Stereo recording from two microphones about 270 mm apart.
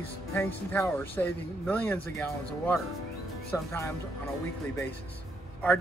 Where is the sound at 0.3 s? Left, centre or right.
Centre.